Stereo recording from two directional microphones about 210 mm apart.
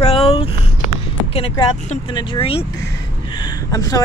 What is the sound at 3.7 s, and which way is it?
Speech, 15° left (ahead or behind).